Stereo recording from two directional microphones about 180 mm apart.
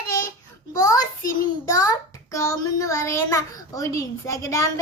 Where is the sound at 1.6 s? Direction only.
20° left (ahead or behind).